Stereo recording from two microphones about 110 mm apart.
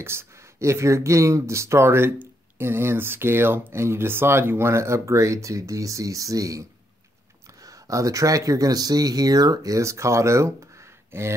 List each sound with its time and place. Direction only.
0.0 s speech: 25° right (ahead or behind)
7.6 s speech: 30° right (ahead or behind)